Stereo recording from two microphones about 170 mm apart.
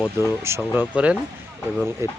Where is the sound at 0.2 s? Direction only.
15° right (ahead or behind).